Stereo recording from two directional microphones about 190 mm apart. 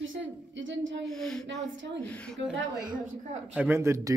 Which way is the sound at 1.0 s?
Centre (ahead or behind).